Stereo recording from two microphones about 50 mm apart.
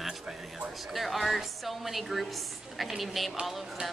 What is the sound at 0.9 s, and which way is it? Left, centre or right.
A woman's voice, centre.